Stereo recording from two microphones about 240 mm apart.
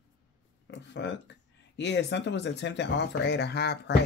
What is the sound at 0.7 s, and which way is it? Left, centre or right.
Speech, left.